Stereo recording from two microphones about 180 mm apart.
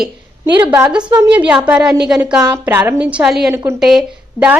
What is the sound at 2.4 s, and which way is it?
Speech, 20° right (ahead or behind).